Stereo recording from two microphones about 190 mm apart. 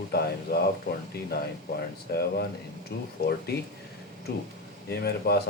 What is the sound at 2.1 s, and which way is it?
Speech, 55° left (ahead or behind).